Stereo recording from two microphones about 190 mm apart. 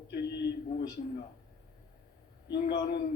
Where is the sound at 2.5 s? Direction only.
55° left (ahead or behind).